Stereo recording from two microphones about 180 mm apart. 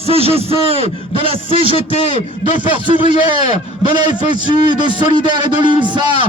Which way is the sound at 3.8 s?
25° right (ahead or behind).